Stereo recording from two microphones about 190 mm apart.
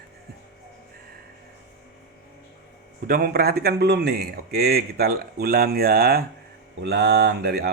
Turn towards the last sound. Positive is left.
turn(degrees=-60)  # may be behind; listen again after turning